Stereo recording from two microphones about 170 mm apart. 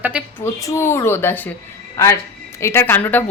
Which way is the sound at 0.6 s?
15° left (ahead or behind).